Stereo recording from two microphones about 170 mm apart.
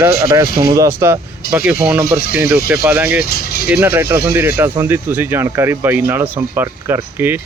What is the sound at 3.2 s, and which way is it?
Vehicle, 65° left (ahead or behind).